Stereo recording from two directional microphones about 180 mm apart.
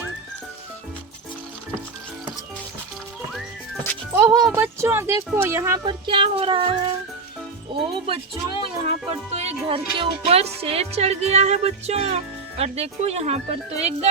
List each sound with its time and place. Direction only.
4.5 s speech: 15° right (ahead or behind); by 6.9 s 30° right (ahead or behind)
7.9 s speech: 30° right (ahead or behind)